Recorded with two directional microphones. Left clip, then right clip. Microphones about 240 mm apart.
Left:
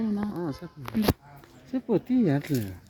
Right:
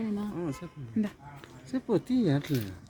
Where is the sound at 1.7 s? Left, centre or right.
Centre.